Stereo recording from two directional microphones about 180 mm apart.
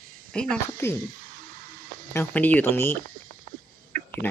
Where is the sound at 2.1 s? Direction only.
10° left (ahead or behind).